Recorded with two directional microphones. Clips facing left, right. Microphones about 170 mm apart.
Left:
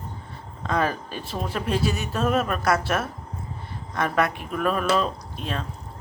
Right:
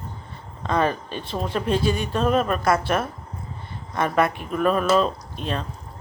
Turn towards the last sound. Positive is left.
turn(degrees=0)  # may be behind; listen again after turning